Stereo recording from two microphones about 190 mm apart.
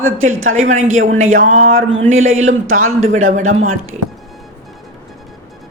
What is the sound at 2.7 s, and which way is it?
Speech, 90° right.